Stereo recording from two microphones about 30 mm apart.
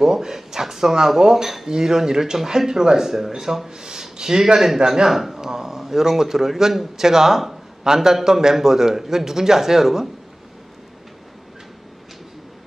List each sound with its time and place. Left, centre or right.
0.0 s a man's voice: centre
1.7 s a man's voice: centre
4.7 s speech: right
5.1 s a man's voice: centre